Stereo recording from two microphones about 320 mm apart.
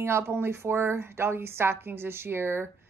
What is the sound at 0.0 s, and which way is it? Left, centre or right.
A woman's voice, centre.